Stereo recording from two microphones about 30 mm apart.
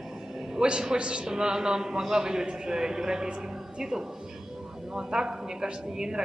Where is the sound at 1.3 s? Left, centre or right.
Right.